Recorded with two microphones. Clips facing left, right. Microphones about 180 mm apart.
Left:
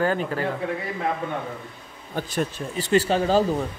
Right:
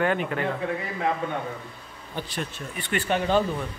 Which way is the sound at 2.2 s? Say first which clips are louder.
Left 6 dB; 45° left (ahead or behind).